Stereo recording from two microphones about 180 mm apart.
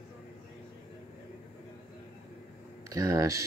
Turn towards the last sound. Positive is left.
turn(degrees=-15)  # may be behind; listen again after turning